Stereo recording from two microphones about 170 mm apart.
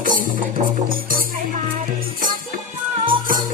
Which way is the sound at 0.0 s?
55° right (ahead or behind).